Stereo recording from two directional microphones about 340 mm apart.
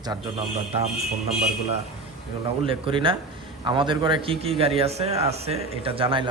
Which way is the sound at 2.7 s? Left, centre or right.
Centre.